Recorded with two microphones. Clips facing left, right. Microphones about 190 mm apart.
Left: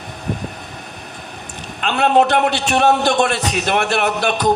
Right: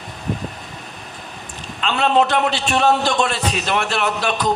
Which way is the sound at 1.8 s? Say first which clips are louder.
Left 2 dB; 50° left (ahead or behind).